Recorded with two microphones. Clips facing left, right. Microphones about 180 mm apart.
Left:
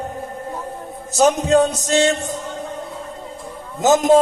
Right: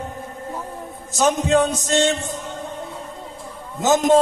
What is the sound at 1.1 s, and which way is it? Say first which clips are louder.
Speech: left 3 dB; 40° left (ahead or behind).